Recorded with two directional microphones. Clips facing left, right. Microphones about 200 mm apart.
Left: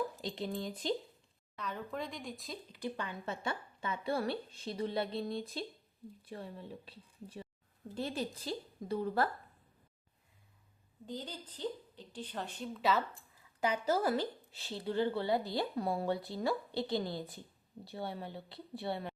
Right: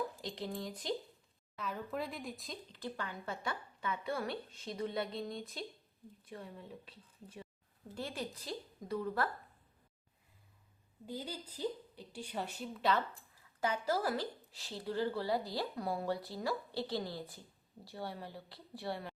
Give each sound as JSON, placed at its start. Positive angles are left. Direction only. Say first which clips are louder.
{"t": 0.2, "sound": "speech", "louder": "left 3 dB", "side_deg": 20}
{"t": 1.5, "sound": "speech", "louder": "even", "side_deg": 0}
{"t": 2.7, "sound": "speech", "louder": "left 3 dB", "side_deg": 15}
{"t": 11.0, "sound": "a woman's voice", "louder": "even", "side_deg": -10}
{"t": 13.6, "sound": "speech", "louder": "left 2 dB", "side_deg": 15}